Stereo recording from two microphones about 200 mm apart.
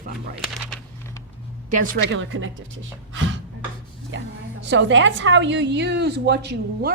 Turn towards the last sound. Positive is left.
turn(degrees=-55)  # may be behind; listen again after turning